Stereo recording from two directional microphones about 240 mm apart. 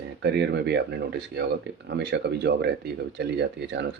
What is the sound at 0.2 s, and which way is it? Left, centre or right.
Speech, right.